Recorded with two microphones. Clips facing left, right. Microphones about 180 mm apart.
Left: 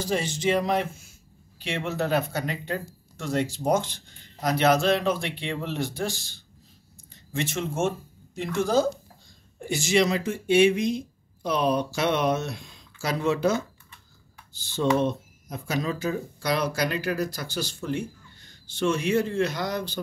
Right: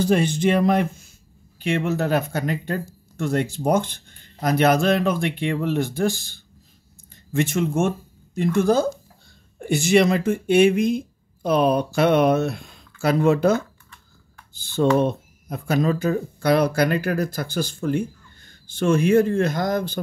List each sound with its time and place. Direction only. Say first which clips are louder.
0.0 s speech: right 7 dB; 60° right (ahead or behind)
14.6 s speech: right 5 dB; 55° right (ahead or behind)